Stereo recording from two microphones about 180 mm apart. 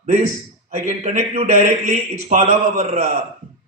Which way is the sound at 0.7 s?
40° right (ahead or behind).